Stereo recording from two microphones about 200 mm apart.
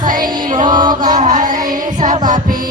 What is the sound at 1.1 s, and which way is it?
Music, 40° right (ahead or behind).